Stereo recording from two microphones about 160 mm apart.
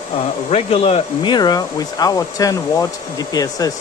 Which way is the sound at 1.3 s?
25° left (ahead or behind).